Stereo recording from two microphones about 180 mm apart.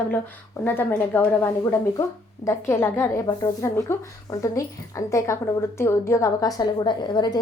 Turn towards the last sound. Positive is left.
turn(degrees=25)  # may be behind; listen again after turning